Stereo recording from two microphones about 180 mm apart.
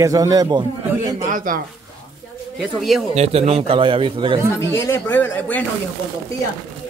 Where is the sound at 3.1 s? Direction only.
35° right (ahead or behind).